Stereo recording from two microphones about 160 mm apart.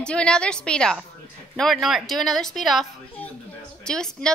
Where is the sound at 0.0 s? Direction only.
5° left (ahead or behind).